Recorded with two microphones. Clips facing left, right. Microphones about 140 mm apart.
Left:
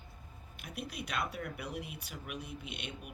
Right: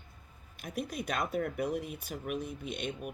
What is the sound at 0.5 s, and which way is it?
Speech, 45° right (ahead or behind).